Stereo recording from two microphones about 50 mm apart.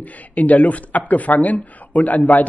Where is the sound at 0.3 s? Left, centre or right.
Left.